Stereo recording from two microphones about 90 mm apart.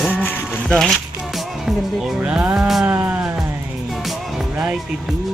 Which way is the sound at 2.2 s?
15° right (ahead or behind).